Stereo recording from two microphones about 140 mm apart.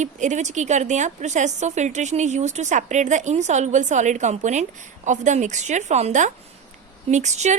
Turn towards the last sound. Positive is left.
turn(degrees=-55)  # may be behind; listen again after turning